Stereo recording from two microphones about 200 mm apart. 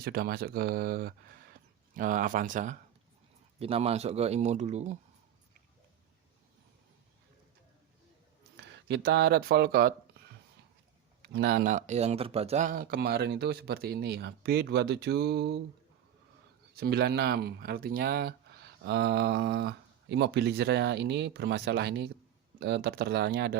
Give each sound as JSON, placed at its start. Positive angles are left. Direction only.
{"t": 0.0, "sound": "speech", "side_deg": -50}
{"t": 3.6, "sound": "speech", "side_deg": -30}
{"t": 8.5, "sound": "speech", "side_deg": -60}
{"t": 11.2, "sound": "speech", "side_deg": -50}
{"t": 16.8, "sound": "speech", "side_deg": -55}